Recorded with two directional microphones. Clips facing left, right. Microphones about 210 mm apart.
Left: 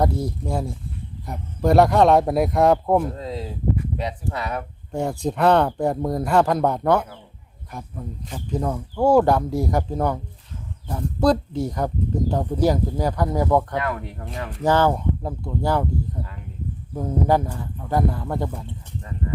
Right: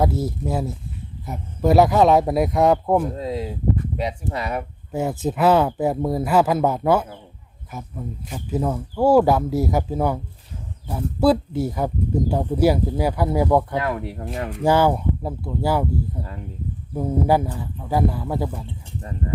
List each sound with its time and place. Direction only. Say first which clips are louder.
0.0 s speech: right 1 dB; 5° right (ahead or behind)
3.2 s speech: right 4 dB; 10° right (ahead or behind)
13.8 s speech: right 2 dB; 25° right (ahead or behind)
14.6 s speech: right 1 dB; 10° right (ahead or behind)
16.9 s speech: right 1 dB; 10° right (ahead or behind)